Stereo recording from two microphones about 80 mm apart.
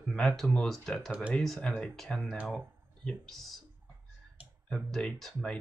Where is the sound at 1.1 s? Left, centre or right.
Centre.